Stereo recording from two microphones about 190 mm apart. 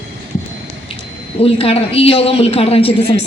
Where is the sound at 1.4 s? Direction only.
30° left (ahead or behind).